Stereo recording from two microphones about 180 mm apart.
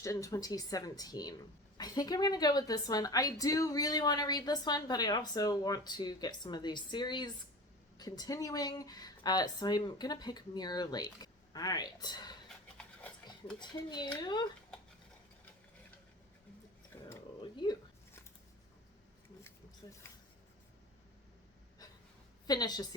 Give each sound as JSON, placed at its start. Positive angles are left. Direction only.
{"t": 0.0, "sound": "a woman's voice", "side_deg": 15}
{"t": 12.5, "sound": "pant", "side_deg": 5}
{"t": 13.6, "sound": "a woman's voice", "side_deg": 25}
{"t": 17.4, "sound": "a sound", "side_deg": 25}
{"t": 19.8, "sound": "a woman's voice", "side_deg": 25}
{"t": 22.4, "sound": "a woman's voice", "side_deg": 20}